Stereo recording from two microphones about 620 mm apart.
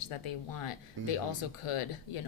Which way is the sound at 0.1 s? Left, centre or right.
Left.